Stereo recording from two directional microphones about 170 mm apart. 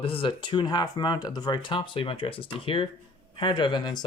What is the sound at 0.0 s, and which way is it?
Speech, 30° left (ahead or behind).